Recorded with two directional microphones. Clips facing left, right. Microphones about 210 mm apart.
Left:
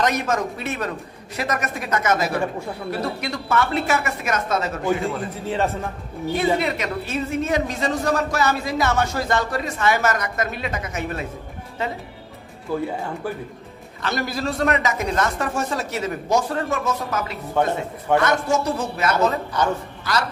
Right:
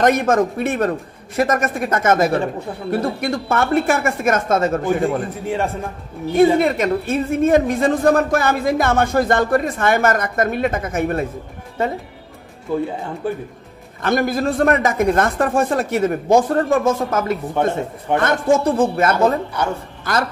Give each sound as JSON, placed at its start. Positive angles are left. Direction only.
{"t": 0.0, "sound": "a woman's voice", "side_deg": -50}
{"t": 6.3, "sound": "a woman's voice", "side_deg": -50}
{"t": 12.7, "sound": "speech", "side_deg": -20}
{"t": 14.0, "sound": "a woman's voice", "side_deg": -50}